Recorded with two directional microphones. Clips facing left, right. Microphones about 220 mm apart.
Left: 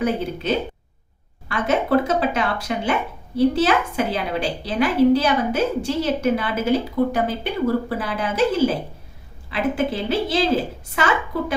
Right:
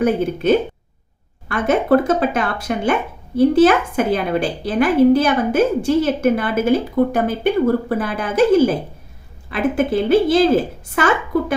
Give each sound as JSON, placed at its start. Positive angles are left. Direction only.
{"t": 0.4, "sound": "a woman's voice", "side_deg": -50}